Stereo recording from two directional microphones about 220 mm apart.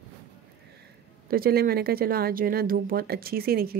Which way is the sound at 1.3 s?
45° right (ahead or behind).